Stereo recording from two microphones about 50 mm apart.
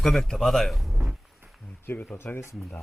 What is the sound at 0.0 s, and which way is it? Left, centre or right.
Speech, centre.